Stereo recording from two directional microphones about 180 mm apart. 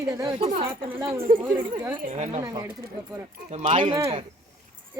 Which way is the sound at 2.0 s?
40° right (ahead or behind).